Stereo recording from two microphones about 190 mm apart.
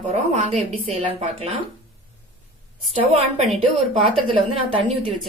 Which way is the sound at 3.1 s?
35° right (ahead or behind).